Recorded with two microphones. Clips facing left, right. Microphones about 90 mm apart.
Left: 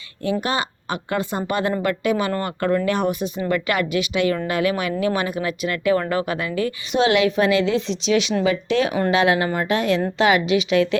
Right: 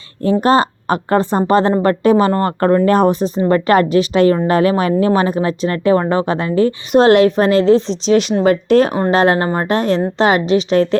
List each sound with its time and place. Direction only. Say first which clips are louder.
0.2 s a woman's voice: right 10 dB; 40° right (ahead or behind)